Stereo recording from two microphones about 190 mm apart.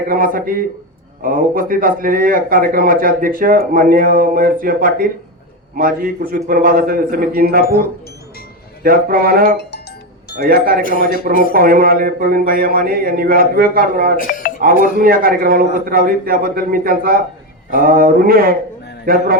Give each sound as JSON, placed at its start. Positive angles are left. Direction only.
{"t": 0.1, "sound": "a man's voice", "side_deg": -50}
{"t": 8.8, "sound": "a man's voice", "side_deg": -50}
{"t": 14.2, "sound": "speech", "side_deg": 45}
{"t": 14.9, "sound": "a man's voice", "side_deg": -50}